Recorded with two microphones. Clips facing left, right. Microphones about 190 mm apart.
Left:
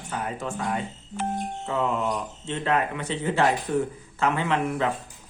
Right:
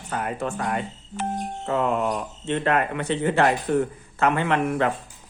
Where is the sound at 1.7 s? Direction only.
55° right (ahead or behind).